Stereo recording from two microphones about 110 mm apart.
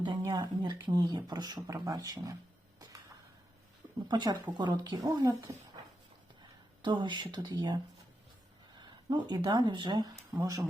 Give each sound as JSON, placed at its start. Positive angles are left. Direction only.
{"t": 0.0, "sound": "speech", "side_deg": -40}
{"t": 4.1, "sound": "speech", "side_deg": -40}
{"t": 6.8, "sound": "speech", "side_deg": -45}